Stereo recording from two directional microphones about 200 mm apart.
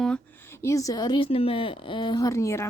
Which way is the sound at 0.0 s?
5° left (ahead or behind).